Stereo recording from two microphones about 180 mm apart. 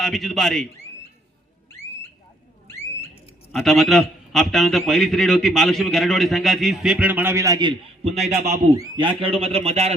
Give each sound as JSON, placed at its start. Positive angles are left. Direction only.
{"t": 0.0, "sound": "a man's voice", "side_deg": 0}
{"t": 2.6, "sound": "a sound", "side_deg": 15}
{"t": 3.5, "sound": "a man's voice", "side_deg": 0}
{"t": 8.0, "sound": "a man's voice", "side_deg": -35}
{"t": 8.7, "sound": "a man's voice", "side_deg": -25}